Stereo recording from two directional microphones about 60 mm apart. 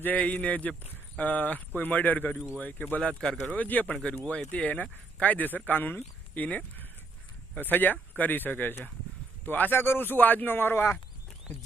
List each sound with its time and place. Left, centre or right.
0.0 s speech: left
3.2 s speech: centre
3.5 s a man's voice: left